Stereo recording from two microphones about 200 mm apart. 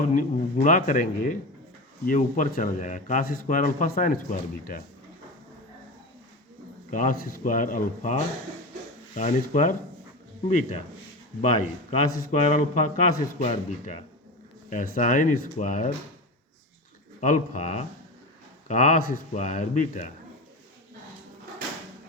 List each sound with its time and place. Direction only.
0.1 s a man's voice: 40° left (ahead or behind)
6.9 s a man's voice: 40° left (ahead or behind)
11.3 s a man's voice: 35° left (ahead or behind)
17.2 s a man's voice: 40° left (ahead or behind)